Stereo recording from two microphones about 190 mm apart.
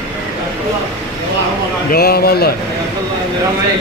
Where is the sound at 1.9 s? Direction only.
55° left (ahead or behind).